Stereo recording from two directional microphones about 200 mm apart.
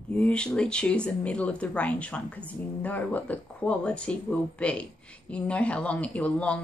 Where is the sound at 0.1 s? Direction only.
5° left (ahead or behind).